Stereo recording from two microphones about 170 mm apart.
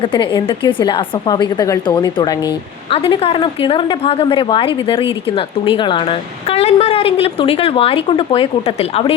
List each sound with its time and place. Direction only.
0.0 s a woman's voice: 30° left (ahead or behind)
2.9 s a woman's voice: 35° left (ahead or behind)